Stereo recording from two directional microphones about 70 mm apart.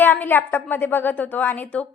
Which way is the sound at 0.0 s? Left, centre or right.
Left.